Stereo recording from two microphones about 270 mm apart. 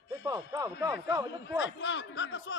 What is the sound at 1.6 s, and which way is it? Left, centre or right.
Speech, left.